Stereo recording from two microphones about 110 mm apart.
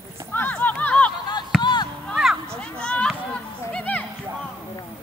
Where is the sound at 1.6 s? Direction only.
40° left (ahead or behind).